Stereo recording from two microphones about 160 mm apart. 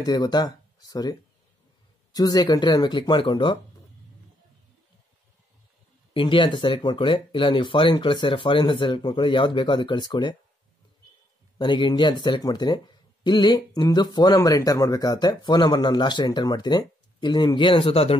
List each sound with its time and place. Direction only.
0.0 s speech: 25° left (ahead or behind)
2.1 s speech: 25° left (ahead or behind)
6.1 s speech: 30° left (ahead or behind)
11.5 s speech: 30° left (ahead or behind)